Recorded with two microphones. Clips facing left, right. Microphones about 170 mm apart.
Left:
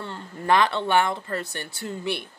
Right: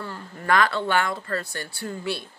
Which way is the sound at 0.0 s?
25° left (ahead or behind).